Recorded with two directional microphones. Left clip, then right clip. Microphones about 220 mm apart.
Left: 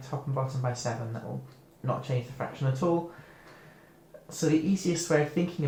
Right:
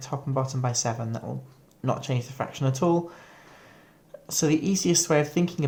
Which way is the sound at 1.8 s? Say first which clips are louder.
Right 3 dB; 55° right (ahead or behind).